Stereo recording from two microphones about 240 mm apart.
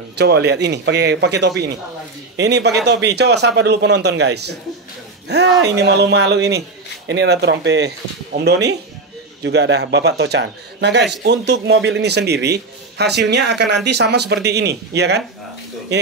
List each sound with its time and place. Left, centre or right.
0.2 s speech: right